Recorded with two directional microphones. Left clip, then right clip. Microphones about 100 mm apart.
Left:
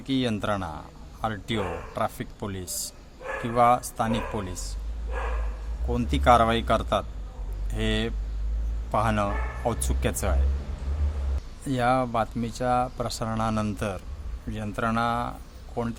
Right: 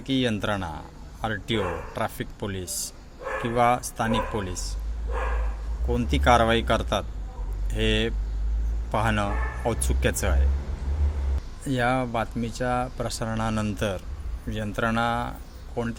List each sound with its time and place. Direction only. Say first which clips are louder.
0.0 s speech: right 2 dB; 15° left (ahead or behind)
5.9 s speech: left 1 dB; 15° left (ahead or behind)
11.6 s speech: left 1 dB; 15° left (ahead or behind)
13.7 s speech: right 3 dB; 5° left (ahead or behind)